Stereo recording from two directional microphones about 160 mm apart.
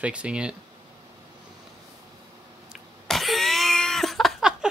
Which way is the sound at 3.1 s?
Centre (ahead or behind).